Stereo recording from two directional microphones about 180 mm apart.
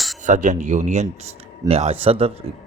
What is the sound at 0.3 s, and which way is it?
A man's voice, 40° right (ahead or behind).